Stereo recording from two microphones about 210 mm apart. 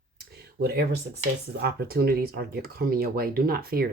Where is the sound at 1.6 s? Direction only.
50° right (ahead or behind).